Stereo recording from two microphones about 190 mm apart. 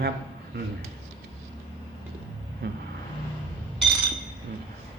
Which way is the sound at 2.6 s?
60° right (ahead or behind).